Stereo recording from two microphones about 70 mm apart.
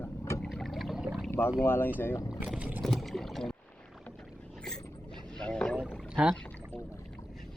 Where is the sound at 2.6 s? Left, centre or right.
Right.